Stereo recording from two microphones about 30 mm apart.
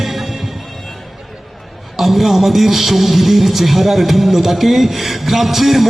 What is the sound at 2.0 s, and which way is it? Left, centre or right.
A man's voice, centre.